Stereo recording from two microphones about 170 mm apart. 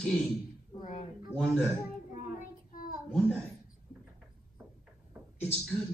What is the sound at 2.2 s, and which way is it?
Child singing, 50° left (ahead or behind).